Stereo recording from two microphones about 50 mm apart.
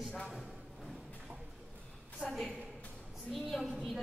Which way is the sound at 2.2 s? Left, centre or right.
Right.